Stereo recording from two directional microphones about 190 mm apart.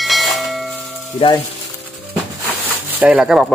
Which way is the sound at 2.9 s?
10° right (ahead or behind).